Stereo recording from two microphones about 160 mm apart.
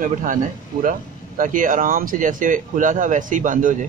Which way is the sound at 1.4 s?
55° right (ahead or behind).